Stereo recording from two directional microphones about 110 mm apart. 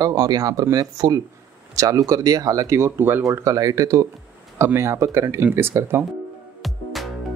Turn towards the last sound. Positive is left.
turn(degrees=0)  # may be behind; listen again after turning